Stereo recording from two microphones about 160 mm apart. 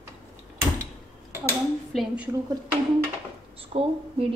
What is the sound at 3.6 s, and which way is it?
Speech, 35° right (ahead or behind).